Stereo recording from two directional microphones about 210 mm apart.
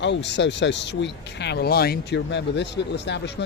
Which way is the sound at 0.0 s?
55° left (ahead or behind).